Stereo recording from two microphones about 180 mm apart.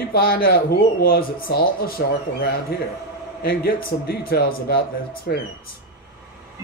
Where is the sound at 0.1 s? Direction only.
55° left (ahead or behind).